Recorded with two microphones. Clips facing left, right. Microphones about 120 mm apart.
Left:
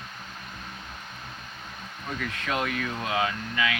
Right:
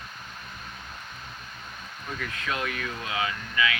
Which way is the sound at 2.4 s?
25° left (ahead or behind).